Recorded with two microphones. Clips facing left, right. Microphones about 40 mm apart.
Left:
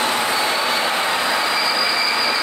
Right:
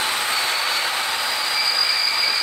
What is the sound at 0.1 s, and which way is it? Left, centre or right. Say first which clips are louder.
Vehicle: left 3 dB; left.